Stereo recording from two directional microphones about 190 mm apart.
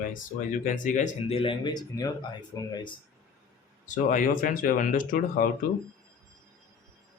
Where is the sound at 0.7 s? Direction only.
40° left (ahead or behind); by 2.9 s 25° left (ahead or behind).